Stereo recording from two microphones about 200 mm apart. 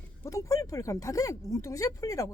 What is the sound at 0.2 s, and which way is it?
Speech, 15° left (ahead or behind).